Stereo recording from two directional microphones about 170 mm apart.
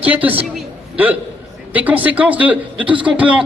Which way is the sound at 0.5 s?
10° right (ahead or behind).